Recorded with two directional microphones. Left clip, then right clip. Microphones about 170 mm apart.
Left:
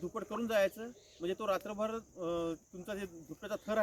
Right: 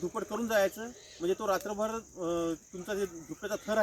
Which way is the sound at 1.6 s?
5° left (ahead or behind).